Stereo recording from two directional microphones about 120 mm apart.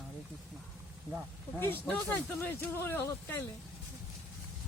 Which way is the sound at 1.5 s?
15° left (ahead or behind).